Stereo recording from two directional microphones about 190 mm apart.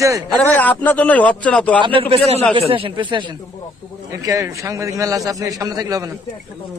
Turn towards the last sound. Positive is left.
turn(degrees=-20)  # may be behind; listen again after turning